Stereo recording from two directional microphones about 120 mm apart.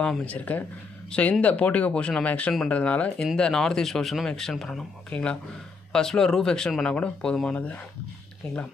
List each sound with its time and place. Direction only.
0.0 s speech: 10° left (ahead or behind)